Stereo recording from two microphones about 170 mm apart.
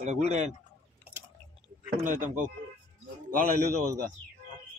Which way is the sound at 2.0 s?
50° right (ahead or behind).